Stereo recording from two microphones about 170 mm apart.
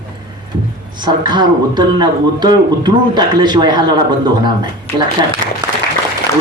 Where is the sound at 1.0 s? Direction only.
25° right (ahead or behind).